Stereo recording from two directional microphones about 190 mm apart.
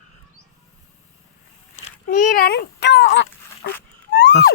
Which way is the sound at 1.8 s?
45° left (ahead or behind).